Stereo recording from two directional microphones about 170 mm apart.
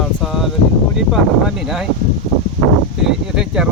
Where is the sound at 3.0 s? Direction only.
5° right (ahead or behind).